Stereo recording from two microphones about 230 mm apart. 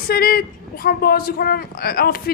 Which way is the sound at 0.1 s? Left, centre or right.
Left.